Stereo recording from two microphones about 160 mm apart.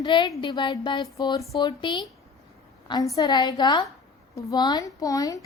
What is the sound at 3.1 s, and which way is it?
Speech, 25° left (ahead or behind).